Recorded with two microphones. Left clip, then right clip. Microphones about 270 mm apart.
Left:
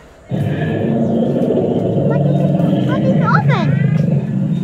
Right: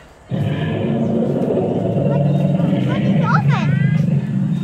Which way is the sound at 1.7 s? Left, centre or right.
Right.